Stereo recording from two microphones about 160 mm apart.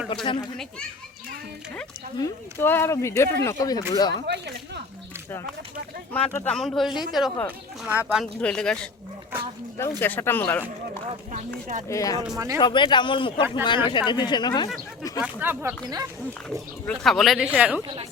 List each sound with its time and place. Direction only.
0.1 s speech: 30° left (ahead or behind)
2.1 s speech: 20° left (ahead or behind)
4.1 s speech: 90° right
6.1 s speech: 10° left (ahead or behind)
10.0 s speech: 15° left (ahead or behind)
11.1 s speech: 45° right (ahead or behind)
11.9 s speech: 20° left (ahead or behind)
15.2 s speech: 10° right (ahead or behind)
16.8 s speech: 5° left (ahead or behind)